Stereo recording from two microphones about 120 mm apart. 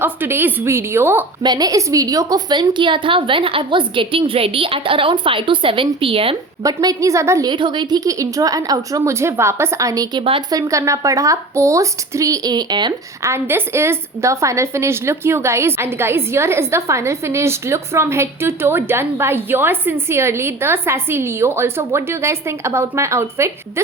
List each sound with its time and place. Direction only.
0.0 s a woman's voice: 20° right (ahead or behind)
1.4 s a woman's voice: 35° right (ahead or behind)
6.6 s a woman's voice: 30° right (ahead or behind)
7.5 s a woman's voice: 40° right (ahead or behind)
13.2 s a woman's voice: 20° right (ahead or behind)